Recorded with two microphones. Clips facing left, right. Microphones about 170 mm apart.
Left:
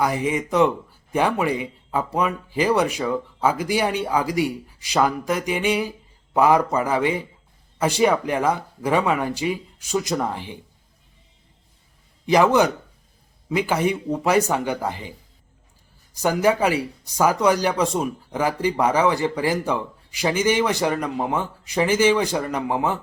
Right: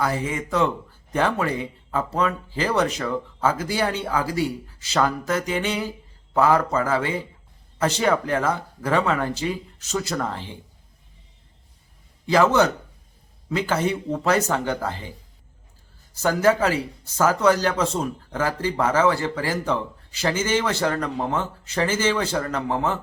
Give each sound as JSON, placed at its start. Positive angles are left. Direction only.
{"t": 0.0, "sound": "speech", "side_deg": 15}
{"t": 12.2, "sound": "speech", "side_deg": 15}
{"t": 16.1, "sound": "speech", "side_deg": 15}